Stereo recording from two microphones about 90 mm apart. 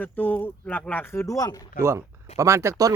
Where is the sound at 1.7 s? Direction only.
30° right (ahead or behind).